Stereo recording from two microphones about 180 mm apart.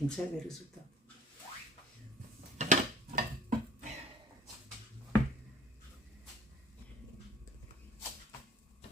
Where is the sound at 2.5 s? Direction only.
45° right (ahead or behind).